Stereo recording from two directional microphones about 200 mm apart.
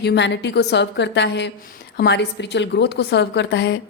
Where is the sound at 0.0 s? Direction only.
60° left (ahead or behind).